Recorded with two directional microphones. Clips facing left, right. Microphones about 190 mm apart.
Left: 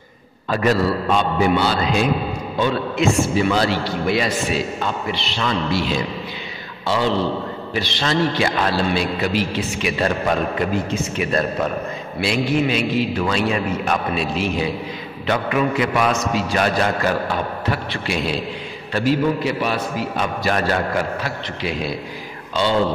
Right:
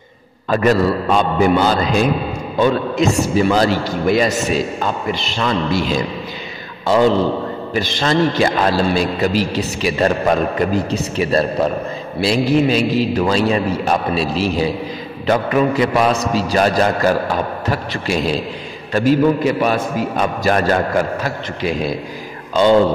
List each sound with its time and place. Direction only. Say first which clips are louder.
0.5 s a man's voice: right 4 dB; 45° right (ahead or behind)